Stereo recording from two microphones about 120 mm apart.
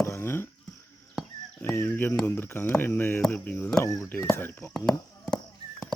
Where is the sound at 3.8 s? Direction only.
30° left (ahead or behind).